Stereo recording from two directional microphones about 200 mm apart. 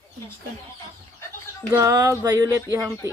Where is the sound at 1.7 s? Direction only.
20° right (ahead or behind).